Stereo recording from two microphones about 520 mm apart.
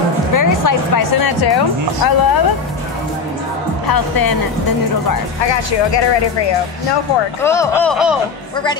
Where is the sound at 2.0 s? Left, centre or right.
Left.